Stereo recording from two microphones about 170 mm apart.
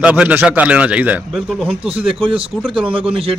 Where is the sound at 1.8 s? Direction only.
35° right (ahead or behind).